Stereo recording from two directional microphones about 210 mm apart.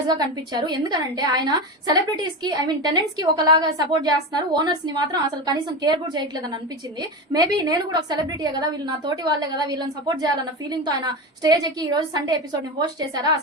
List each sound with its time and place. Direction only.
0.1 s a woman's voice: 20° right (ahead or behind)